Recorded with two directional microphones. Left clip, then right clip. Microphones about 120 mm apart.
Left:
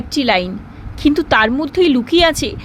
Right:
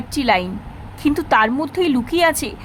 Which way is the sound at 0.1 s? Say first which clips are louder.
Left 2 dB; 15° left (ahead or behind).